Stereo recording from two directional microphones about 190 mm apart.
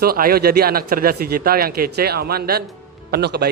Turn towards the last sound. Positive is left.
turn(degrees=-55)  # may be behind; listen again after turning